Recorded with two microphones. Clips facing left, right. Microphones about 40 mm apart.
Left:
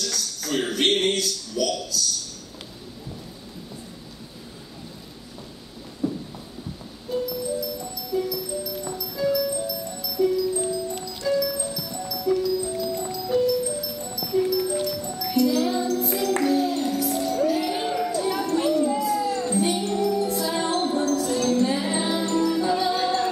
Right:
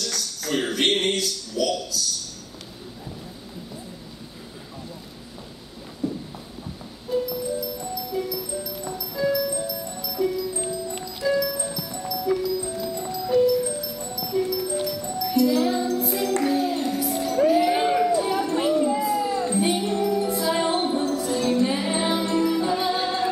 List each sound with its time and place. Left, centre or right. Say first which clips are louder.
0.0 s speech: even; centre
6.0 s clip-clop: left 1 dB; centre
7.1 s music: right 2 dB; centre
8.1 s music: left 4 dB; centre
17.5 s a sound: right 5 dB; centre